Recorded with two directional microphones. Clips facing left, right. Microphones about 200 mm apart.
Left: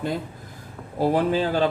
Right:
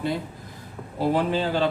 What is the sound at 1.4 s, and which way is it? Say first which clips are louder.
Speech: left 2 dB; 45° left (ahead or behind).